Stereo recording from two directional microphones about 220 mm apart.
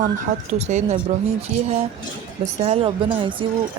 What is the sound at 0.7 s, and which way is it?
Speech, 30° right (ahead or behind).